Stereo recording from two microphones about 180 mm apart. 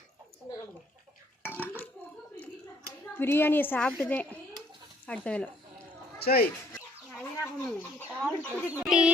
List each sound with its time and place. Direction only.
1.4 s burping: 10° left (ahead or behind)
3.2 s a woman's voice: 10° left (ahead or behind)
6.2 s speech: 60° left (ahead or behind)
7.1 s chicken: 10° left (ahead or behind)
8.5 s speech: 5° right (ahead or behind)